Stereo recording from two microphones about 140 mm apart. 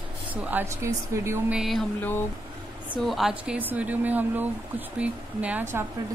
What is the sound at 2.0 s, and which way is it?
Speech, 15° left (ahead or behind).